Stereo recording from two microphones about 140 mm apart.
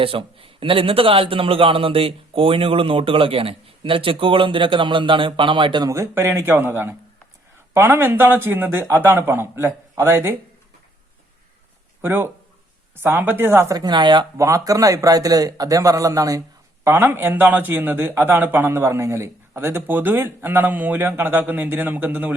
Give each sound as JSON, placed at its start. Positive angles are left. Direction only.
{"t": 0.0, "sound": "a man's voice", "side_deg": -40}
{"t": 5.9, "sound": "a man's voice", "side_deg": -20}
{"t": 12.0, "sound": "a man's voice", "side_deg": -15}
{"t": 14.3, "sound": "a man's voice", "side_deg": -20}